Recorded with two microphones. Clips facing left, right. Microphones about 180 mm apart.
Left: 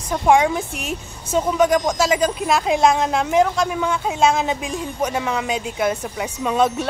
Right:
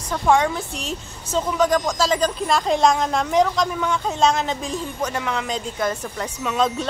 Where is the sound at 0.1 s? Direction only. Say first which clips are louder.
Left 3 dB; 15° left (ahead or behind).